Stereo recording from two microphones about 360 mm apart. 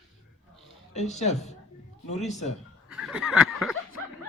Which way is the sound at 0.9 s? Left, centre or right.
Centre.